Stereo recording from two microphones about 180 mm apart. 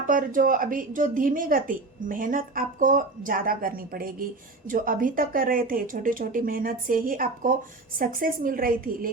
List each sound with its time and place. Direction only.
0.1 s a woman's voice: 50° right (ahead or behind)